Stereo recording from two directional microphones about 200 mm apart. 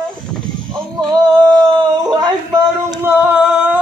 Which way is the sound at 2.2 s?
20° right (ahead or behind).